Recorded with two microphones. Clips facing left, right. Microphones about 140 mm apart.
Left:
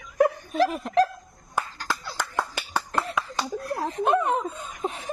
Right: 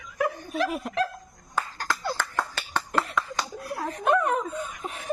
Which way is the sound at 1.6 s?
15° left (ahead or behind).